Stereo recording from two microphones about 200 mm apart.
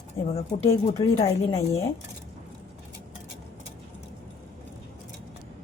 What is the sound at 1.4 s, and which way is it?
Speech, 30° left (ahead or behind).